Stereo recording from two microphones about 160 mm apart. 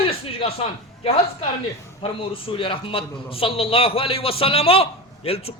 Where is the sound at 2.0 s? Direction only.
35° left (ahead or behind).